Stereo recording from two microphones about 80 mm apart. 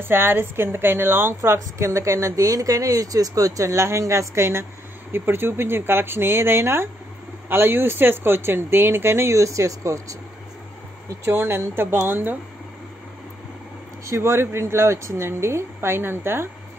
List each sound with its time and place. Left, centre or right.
0.0 s a woman's voice: right
11.2 s a woman's voice: right
14.0 s a woman's voice: right